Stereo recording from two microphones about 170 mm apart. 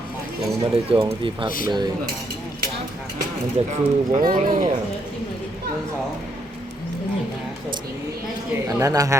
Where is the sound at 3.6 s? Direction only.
40° right (ahead or behind).